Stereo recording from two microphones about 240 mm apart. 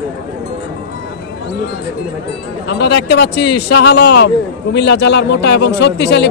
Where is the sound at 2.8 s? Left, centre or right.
Left.